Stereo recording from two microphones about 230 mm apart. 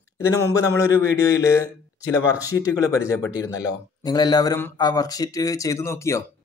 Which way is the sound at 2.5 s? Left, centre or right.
Centre.